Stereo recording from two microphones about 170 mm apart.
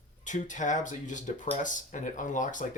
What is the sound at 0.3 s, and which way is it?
Speech, 50° left (ahead or behind).